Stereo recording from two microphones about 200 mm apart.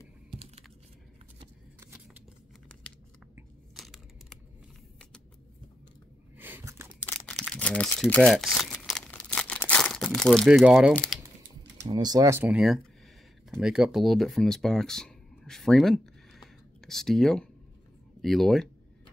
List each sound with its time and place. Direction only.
1.8 s a sound: 10° right (ahead or behind)
3.7 s crumpling: centre (ahead or behind)
6.3 s a sound: 10° right (ahead or behind)
7.2 s crumpling: centre (ahead or behind)
10.9 s speech: 5° left (ahead or behind)
11.9 s speech: 20° right (ahead or behind); by 18.7 s centre (ahead or behind)